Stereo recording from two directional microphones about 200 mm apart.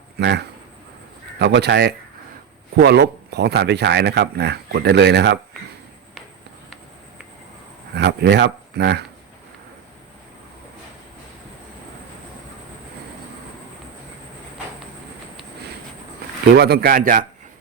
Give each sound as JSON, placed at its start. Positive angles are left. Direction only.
{"t": 0.2, "sound": "speech", "side_deg": -55}
{"t": 7.9, "sound": "speech", "side_deg": -55}
{"t": 16.6, "sound": "speech", "side_deg": -50}